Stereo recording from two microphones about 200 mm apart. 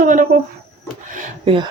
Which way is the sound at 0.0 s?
40° right (ahead or behind).